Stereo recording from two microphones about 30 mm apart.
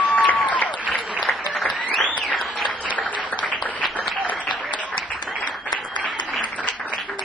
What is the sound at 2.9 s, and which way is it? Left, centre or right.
Applause, left.